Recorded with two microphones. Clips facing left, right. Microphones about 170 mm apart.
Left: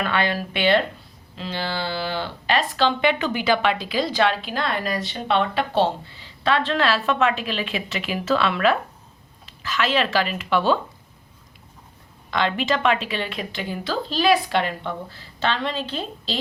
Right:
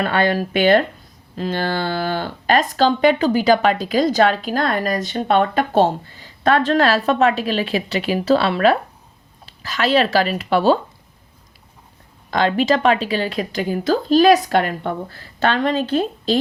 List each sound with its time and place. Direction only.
0.0 s speech: 40° right (ahead or behind)
12.3 s speech: 40° right (ahead or behind)